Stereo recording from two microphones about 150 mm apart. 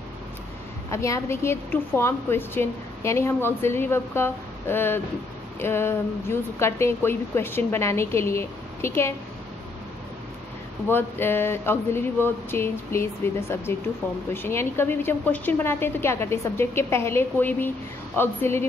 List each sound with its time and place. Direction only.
0.8 s a woman's voice: 20° left (ahead or behind)
10.9 s a woman's voice: 15° left (ahead or behind)